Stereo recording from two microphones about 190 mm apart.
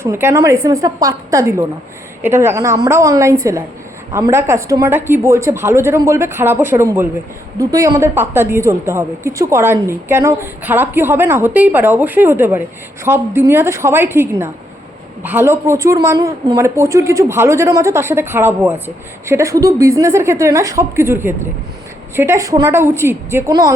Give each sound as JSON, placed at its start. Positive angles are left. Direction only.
{"t": 0.0, "sound": "a woman's voice", "side_deg": -15}